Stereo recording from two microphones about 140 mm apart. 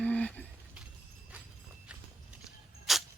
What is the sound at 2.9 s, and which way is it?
Clang, centre (ahead or behind).